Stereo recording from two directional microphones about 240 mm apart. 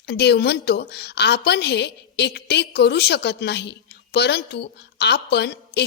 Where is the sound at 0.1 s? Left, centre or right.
Left.